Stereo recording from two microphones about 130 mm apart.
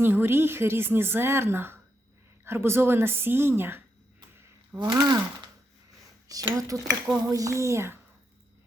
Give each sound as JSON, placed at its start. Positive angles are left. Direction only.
{"t": 0.0, "sound": "a woman's voice", "side_deg": -15}
{"t": 4.8, "sound": "a woman's voice", "side_deg": -30}
{"t": 6.2, "sound": "a woman's voice", "side_deg": -25}